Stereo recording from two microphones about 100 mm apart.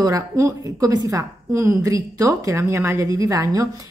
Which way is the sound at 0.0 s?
35° right (ahead or behind).